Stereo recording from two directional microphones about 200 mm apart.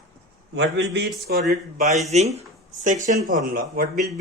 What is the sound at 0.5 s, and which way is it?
A man's voice, 60° right (ahead or behind).